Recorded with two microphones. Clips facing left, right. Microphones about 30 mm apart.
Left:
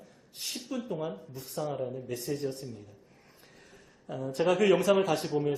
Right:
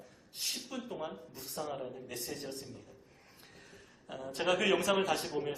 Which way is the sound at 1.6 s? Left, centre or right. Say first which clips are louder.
Left 7 dB; centre.